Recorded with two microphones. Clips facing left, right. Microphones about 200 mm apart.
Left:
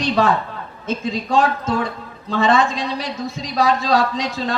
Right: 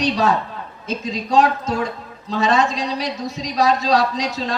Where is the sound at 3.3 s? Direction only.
40° right (ahead or behind).